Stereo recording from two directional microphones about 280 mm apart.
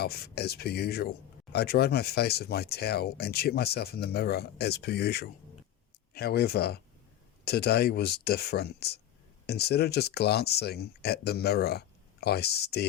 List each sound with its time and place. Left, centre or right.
0.0 s speech: left